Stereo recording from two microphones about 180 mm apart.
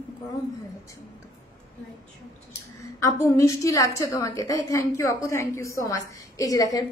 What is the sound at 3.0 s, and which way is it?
A woman's voice, 15° left (ahead or behind).